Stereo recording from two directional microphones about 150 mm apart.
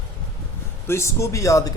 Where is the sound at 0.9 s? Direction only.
20° left (ahead or behind).